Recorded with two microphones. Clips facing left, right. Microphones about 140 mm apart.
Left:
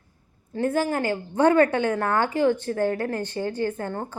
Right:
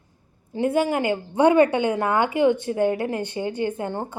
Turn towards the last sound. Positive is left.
turn(degrees=-20)  # may be behind; listen again after turning